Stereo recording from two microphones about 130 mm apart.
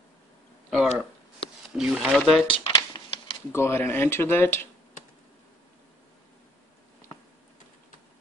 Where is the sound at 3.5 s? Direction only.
20° left (ahead or behind).